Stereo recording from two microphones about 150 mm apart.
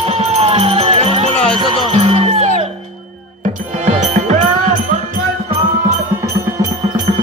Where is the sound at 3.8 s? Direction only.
55° right (ahead or behind).